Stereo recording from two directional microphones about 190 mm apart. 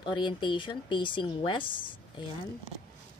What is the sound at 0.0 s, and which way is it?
A woman's voice, 25° left (ahead or behind).